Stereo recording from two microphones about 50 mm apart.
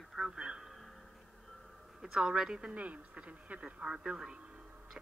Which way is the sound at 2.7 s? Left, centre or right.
Right.